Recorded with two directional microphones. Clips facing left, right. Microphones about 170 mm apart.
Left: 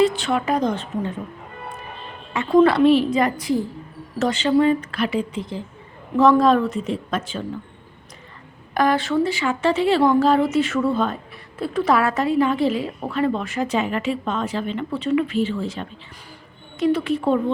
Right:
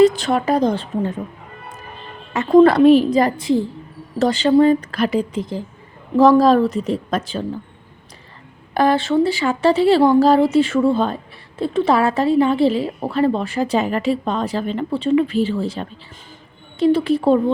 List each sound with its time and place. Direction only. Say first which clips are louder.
0.0 s speech: right 5 dB; 40° right (ahead or behind)
2.3 s speech: right 4 dB; 40° right (ahead or behind)
8.7 s speech: right 3 dB; 30° right (ahead or behind)